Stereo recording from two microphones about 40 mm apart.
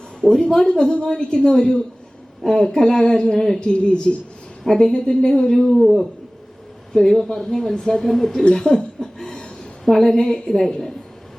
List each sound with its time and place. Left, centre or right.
0.2 s speech: centre
3.6 s speech: left
4.6 s speech: centre
5.7 s a man's voice: centre
6.9 s speech: centre
7.8 s speech: centre
8.0 s speech: centre
8.5 s a sound: centre
9.9 s speech: centre